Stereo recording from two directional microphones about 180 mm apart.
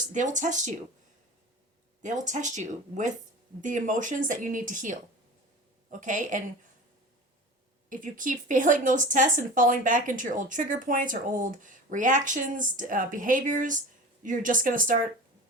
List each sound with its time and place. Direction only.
0.1 s speech: 45° right (ahead or behind)
2.0 s speech: 45° right (ahead or behind)
7.9 s speech: 45° right (ahead or behind)